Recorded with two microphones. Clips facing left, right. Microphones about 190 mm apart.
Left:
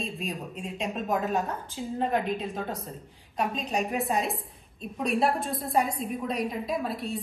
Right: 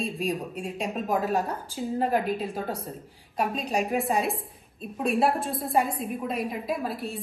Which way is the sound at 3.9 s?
5° right (ahead or behind).